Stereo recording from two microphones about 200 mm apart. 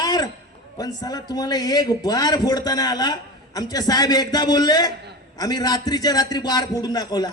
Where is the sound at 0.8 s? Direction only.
20° left (ahead or behind).